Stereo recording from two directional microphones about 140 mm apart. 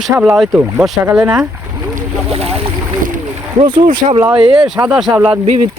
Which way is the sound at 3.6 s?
40° right (ahead or behind).